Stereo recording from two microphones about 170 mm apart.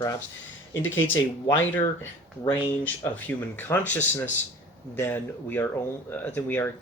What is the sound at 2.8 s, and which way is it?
Speech, 10° left (ahead or behind).